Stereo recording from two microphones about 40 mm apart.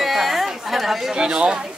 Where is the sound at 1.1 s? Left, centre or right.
Centre.